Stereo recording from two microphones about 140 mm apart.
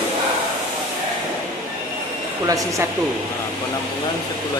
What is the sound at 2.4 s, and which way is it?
Speech, 25° right (ahead or behind).